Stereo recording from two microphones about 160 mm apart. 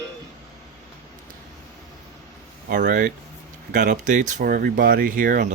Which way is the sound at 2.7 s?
55° right (ahead or behind).